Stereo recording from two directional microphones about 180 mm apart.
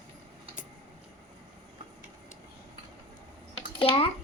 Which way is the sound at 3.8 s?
30° left (ahead or behind).